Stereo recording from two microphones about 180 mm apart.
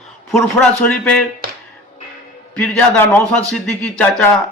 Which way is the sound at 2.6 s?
10° left (ahead or behind).